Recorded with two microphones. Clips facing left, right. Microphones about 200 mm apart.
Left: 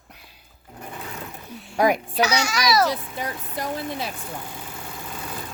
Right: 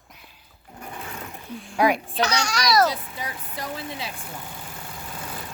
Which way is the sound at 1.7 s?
45° left (ahead or behind).